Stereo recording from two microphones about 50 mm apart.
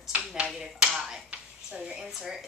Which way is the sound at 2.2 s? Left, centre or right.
Centre.